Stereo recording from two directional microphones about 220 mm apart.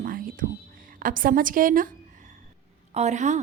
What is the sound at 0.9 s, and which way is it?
A woman's voice, 40° right (ahead or behind).